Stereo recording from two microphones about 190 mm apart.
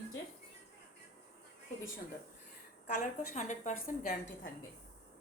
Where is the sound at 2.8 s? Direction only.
40° left (ahead or behind).